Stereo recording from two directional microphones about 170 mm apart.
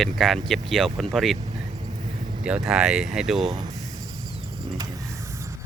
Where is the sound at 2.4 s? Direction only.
5° right (ahead or behind).